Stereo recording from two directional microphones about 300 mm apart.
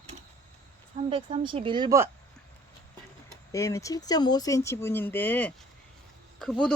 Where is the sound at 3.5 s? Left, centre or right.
Centre.